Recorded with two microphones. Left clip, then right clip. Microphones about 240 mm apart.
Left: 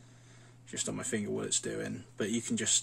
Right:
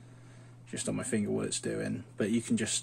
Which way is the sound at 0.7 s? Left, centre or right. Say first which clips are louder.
Right 1 dB; centre.